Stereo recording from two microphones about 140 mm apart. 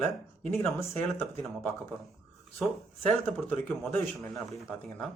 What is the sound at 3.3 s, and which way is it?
Speech, 10° left (ahead or behind).